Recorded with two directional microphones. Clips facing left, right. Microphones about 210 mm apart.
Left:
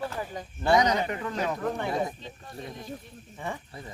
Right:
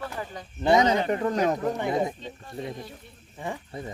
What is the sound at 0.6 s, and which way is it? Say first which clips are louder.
Speech: right 2 dB; 20° right (ahead or behind).